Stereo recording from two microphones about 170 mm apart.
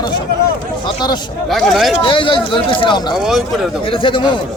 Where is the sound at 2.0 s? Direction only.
30° left (ahead or behind).